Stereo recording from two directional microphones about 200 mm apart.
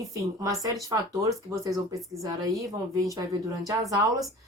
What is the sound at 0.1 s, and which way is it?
A woman's voice, 15° right (ahead or behind).